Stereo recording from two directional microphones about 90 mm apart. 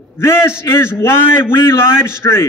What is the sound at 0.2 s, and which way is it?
A man's voice, 30° left (ahead or behind).